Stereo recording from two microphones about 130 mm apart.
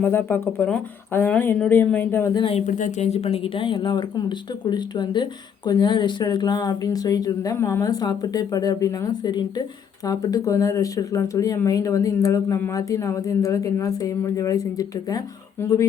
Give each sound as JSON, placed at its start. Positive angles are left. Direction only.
{"t": 0.0, "sound": "speech", "side_deg": 15}
{"t": 2.3, "sound": "speech", "side_deg": 45}
{"t": 2.6, "sound": "speech", "side_deg": 75}